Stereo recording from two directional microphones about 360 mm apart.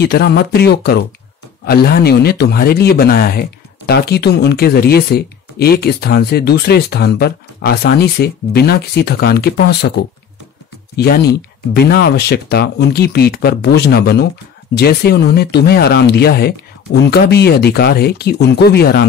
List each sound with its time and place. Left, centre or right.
0.0 s speech: left
11.0 s speech: left